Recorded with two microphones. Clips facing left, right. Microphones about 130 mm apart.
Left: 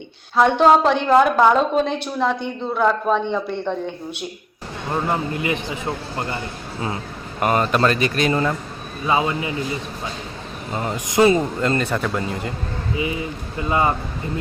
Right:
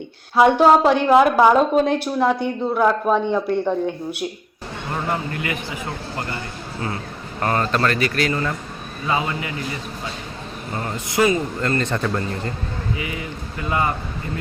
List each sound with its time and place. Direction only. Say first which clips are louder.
0.3 s a woman's voice: right 1 dB; 10° right (ahead or behind)
5.0 s a man's voice: left 2 dB; 25° left (ahead or behind)
10.8 s a man's voice: left 3 dB; 15° left (ahead or behind)
11.8 s speech: even; 10° left (ahead or behind)
13.0 s a man's voice: left 4 dB; 25° left (ahead or behind)